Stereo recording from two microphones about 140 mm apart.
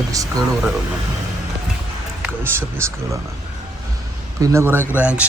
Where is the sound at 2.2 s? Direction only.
15° right (ahead or behind).